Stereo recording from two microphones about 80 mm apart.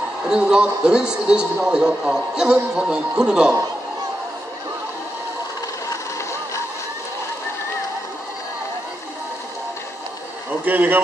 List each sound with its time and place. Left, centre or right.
0.3 s a man's voice: centre
10.6 s a man's voice: right